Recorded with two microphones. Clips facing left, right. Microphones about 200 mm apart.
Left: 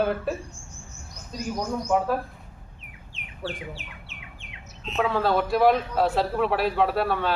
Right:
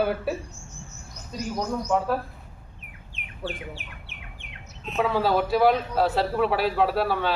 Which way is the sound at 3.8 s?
55° right (ahead or behind).